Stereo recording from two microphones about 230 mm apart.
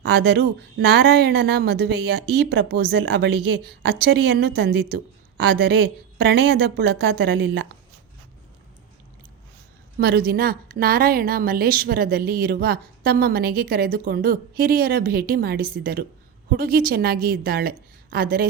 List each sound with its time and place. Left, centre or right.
0.0 s speech: right
10.0 s a woman's voice: right